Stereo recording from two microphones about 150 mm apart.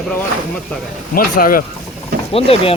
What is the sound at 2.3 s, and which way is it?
Speech, 40° left (ahead or behind).